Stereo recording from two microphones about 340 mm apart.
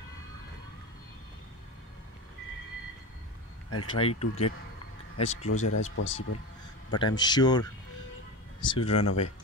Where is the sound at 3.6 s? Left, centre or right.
Left.